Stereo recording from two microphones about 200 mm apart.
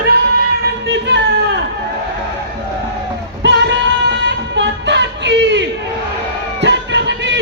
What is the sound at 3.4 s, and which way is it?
Music, 60° right (ahead or behind).